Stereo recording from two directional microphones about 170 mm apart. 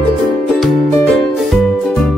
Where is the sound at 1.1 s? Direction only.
5° left (ahead or behind).